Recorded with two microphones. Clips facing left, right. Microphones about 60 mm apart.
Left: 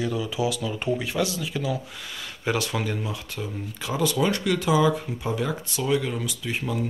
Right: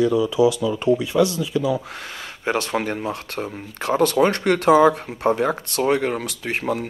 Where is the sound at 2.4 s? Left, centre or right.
Right.